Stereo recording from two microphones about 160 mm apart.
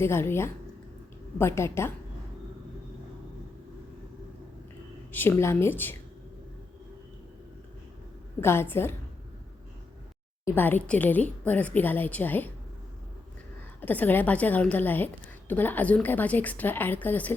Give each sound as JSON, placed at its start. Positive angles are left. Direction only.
{"t": 0.0, "sound": "a woman's voice", "side_deg": 15}
{"t": 5.1, "sound": "a woman's voice", "side_deg": 10}
{"t": 8.4, "sound": "a woman's voice", "side_deg": 15}
{"t": 10.4, "sound": "a woman's voice", "side_deg": 15}
{"t": 13.8, "sound": "a woman's voice", "side_deg": 10}